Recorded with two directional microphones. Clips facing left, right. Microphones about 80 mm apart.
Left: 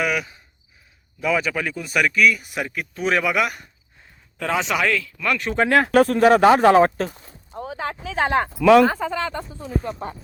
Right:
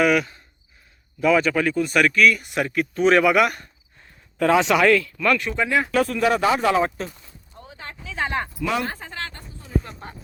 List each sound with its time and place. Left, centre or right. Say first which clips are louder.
0.0 s a man's voice: right 5 dB; centre
5.1 s speech: right 3 dB; centre
5.4 s speech: left 3 dB; left
5.6 s speech: left 6 dB; left
7.5 s a sound: left 11 dB; left
8.0 s speech: left 5 dB; left